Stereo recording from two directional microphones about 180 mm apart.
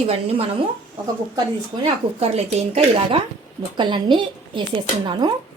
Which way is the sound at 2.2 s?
35° right (ahead or behind).